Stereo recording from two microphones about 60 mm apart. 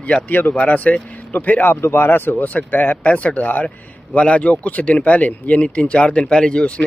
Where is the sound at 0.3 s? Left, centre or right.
Left.